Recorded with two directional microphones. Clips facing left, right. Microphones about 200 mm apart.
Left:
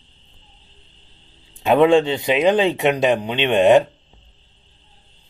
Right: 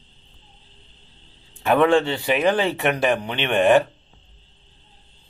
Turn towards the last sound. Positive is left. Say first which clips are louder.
# left 3 dB
turn(degrees=20)  # may be behind; listen again after turning